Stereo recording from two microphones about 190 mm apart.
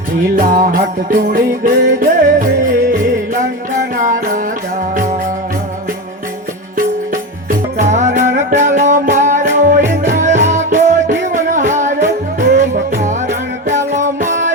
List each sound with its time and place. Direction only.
0.3 s music: 45° right (ahead or behind)
3.3 s music: 45° right (ahead or behind)
7.8 s music: 40° right (ahead or behind)